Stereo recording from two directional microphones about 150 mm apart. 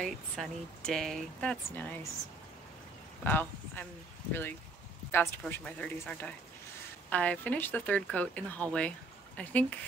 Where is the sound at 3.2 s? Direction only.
15° left (ahead or behind).